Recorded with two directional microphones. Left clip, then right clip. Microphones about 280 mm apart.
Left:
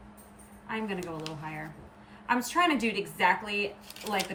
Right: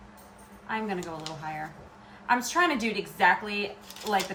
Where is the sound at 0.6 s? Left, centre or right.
Centre.